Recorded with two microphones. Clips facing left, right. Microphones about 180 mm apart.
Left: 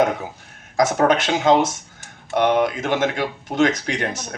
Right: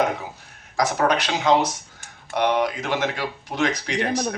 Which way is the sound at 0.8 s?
50° left (ahead or behind).